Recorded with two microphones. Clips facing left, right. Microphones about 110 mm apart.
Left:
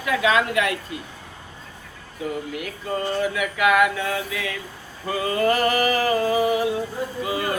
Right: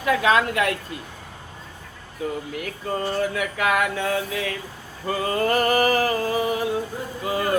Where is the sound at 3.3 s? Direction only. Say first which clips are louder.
Left 3 dB; 40° right (ahead or behind).